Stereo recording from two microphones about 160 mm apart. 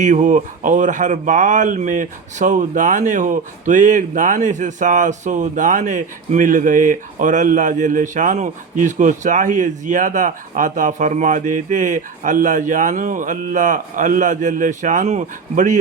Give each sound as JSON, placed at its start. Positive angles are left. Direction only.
{"t": 0.0, "sound": "speech", "side_deg": -50}